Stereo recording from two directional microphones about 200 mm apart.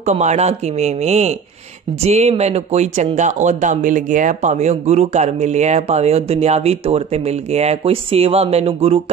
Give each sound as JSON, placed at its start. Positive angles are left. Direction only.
{"t": 0.0, "sound": "speech", "side_deg": -35}